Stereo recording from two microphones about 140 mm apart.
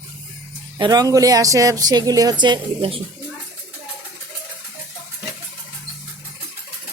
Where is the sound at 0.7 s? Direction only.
30° right (ahead or behind).